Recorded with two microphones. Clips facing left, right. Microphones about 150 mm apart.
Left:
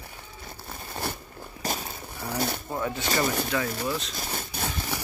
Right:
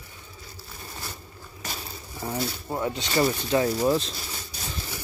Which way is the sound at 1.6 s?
35° left (ahead or behind).